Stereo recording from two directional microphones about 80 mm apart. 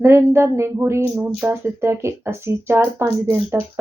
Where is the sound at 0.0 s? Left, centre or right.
Right.